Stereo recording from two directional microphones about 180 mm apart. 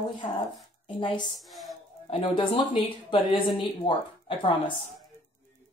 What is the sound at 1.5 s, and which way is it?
Music, centre (ahead or behind).